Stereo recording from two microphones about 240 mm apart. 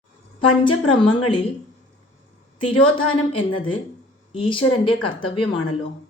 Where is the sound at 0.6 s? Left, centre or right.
Left.